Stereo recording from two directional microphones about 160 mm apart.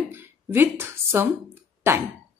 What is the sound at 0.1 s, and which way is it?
Speech, 15° right (ahead or behind).